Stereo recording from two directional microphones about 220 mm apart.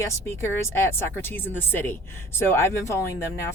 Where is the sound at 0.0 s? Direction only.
10° left (ahead or behind).